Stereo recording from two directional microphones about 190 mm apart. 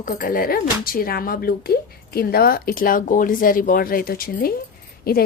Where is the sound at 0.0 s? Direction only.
45° left (ahead or behind).